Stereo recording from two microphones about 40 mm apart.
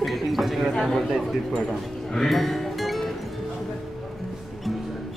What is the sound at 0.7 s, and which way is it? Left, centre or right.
Speech, centre.